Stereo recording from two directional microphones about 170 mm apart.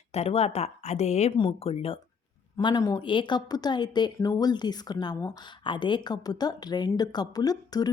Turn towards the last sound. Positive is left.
turn(degrees=25)  # may be behind; listen again after turning